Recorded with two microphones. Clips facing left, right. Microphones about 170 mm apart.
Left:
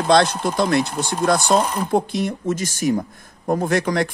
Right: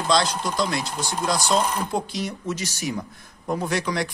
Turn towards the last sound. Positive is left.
turn(degrees=50)  # may be behind; listen again after turning